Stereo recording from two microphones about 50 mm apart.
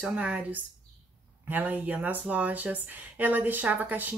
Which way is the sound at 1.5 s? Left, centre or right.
Right.